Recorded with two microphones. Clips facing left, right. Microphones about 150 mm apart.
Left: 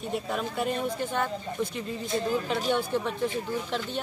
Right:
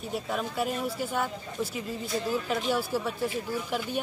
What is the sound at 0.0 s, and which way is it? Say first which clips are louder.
Speech: left 1 dB; centre (ahead or behind).